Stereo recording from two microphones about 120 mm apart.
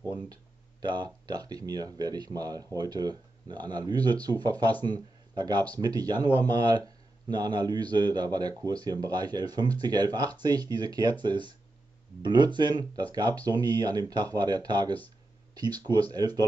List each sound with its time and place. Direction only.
0.3 s a man's voice: 35° right (ahead or behind)